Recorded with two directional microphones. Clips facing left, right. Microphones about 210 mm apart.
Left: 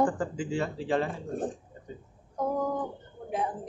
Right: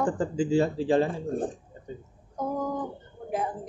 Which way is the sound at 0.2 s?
30° right (ahead or behind).